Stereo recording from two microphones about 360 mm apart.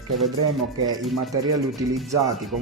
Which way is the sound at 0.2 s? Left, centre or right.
Centre.